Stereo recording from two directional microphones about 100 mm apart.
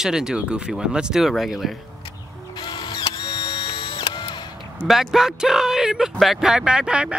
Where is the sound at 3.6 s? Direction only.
55° left (ahead or behind).